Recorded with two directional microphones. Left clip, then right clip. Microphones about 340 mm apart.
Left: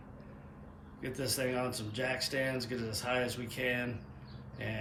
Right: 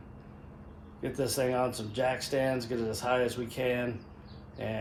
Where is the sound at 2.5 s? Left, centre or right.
Right.